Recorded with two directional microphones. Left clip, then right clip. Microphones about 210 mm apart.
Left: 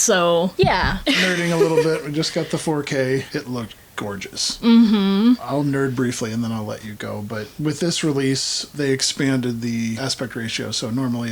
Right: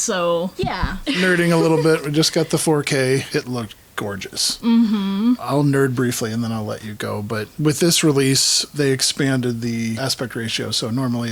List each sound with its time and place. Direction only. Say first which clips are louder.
0.0 s speech: left 3 dB; 20° left (ahead or behind)
1.3 s speech: right 2 dB; 60° right (ahead or behind)
4.0 s speech: right 2 dB; 40° right (ahead or behind)
4.6 s speech: left 7 dB; 20° left (ahead or behind)
5.5 s speech: right 3 dB; 45° right (ahead or behind)
7.0 s speech: right 5 dB; 50° right (ahead or behind)